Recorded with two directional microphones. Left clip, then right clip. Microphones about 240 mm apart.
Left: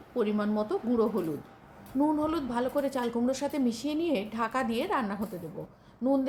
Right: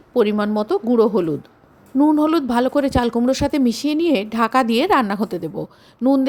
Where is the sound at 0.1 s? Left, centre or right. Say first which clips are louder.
Right 12 dB; right.